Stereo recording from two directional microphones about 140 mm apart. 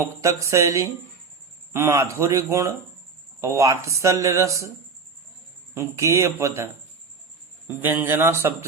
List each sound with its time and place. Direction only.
0.0 s speech: 20° right (ahead or behind)
5.7 s speech: 20° right (ahead or behind)
7.7 s a man's voice: 15° right (ahead or behind)